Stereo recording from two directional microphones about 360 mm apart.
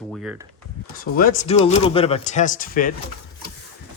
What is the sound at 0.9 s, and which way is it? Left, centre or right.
Speech, left.